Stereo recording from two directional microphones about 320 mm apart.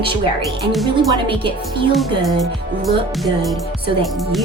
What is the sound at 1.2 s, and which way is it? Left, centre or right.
Speech, centre.